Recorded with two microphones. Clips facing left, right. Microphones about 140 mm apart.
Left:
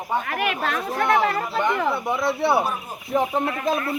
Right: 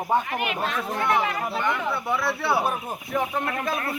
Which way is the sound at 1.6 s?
20° left (ahead or behind).